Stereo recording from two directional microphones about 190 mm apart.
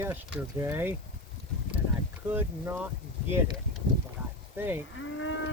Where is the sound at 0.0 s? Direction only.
10° right (ahead or behind).